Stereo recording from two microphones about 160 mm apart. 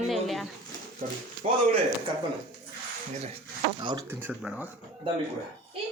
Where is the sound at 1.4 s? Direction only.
40° right (ahead or behind).